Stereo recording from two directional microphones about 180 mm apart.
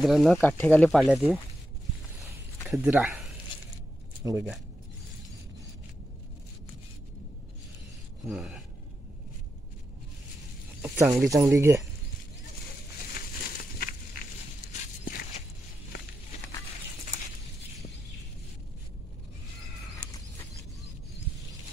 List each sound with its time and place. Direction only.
0.0 s speech: centre (ahead or behind)
2.7 s speech: 5° right (ahead or behind)
4.2 s speech: 20° right (ahead or behind)
8.3 s speech: centre (ahead or behind)
10.8 s a sound: 15° right (ahead or behind)
11.2 s speech: 15° right (ahead or behind)
14.7 s walk: 40° left (ahead or behind)